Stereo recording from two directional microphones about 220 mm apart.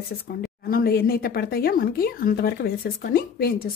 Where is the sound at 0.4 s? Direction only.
45° left (ahead or behind).